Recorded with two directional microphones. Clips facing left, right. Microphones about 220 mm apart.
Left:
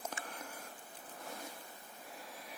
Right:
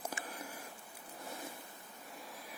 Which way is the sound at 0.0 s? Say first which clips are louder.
Right 1 dB; 10° right (ahead or behind).